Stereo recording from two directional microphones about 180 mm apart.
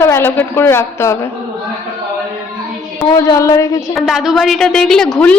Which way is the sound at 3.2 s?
15° left (ahead or behind).